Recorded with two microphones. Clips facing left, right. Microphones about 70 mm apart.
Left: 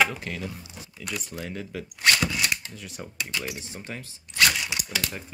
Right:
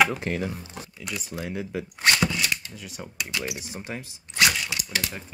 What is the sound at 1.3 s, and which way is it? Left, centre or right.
Speech, centre.